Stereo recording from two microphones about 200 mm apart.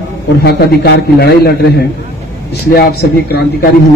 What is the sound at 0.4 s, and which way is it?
A man's voice, 55° left (ahead or behind).